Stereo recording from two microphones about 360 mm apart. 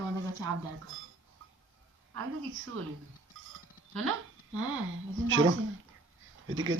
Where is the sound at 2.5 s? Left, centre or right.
Right.